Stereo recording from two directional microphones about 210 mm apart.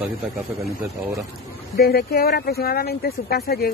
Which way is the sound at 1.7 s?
45° left (ahead or behind).